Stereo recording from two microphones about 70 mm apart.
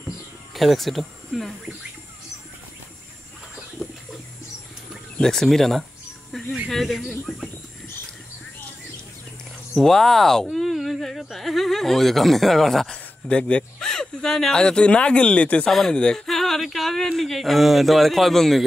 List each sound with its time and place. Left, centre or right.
0.6 s speech: centre
5.2 s speech: centre
6.3 s a sound: centre
6.7 s speech: centre
9.8 s speech: centre